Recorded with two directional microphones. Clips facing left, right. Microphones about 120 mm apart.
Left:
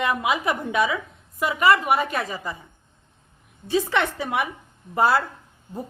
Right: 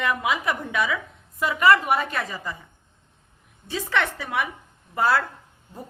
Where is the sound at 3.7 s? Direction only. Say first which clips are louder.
Left 3 dB; 20° left (ahead or behind).